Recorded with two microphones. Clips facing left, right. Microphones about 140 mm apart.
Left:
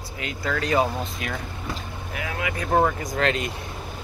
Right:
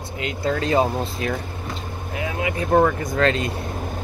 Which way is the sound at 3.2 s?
30° right (ahead or behind).